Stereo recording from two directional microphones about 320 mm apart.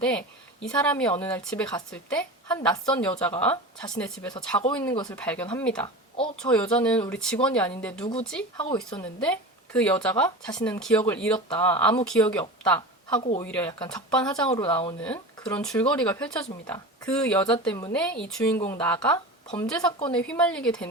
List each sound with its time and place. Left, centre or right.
0.7 s a woman's voice: centre
8.5 s a woman's voice: centre
9.0 s speech: centre
11.3 s a woman's voice: centre
12.0 s a woman's voice: centre
19.6 s speech: centre